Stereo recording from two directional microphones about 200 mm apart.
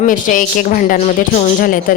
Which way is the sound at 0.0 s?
40° left (ahead or behind).